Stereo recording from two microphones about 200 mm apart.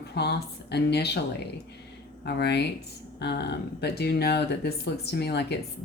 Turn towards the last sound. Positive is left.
turn(degrees=55)  # may be behind; listen again after turning